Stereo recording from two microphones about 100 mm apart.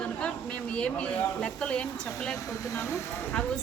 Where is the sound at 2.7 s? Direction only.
30° left (ahead or behind).